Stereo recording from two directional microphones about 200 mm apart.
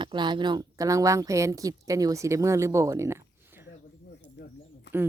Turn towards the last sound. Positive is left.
turn(degrees=60)  # may be behind; listen again after turning